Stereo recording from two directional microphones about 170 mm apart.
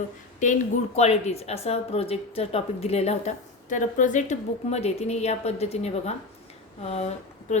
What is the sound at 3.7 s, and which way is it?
A woman's voice, 50° left (ahead or behind).